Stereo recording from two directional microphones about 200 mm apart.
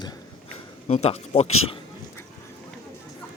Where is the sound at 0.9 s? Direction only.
30° left (ahead or behind).